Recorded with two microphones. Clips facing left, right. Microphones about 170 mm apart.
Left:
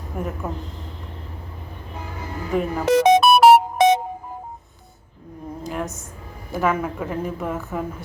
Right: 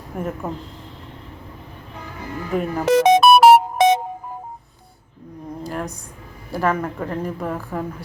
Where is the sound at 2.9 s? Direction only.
90° right.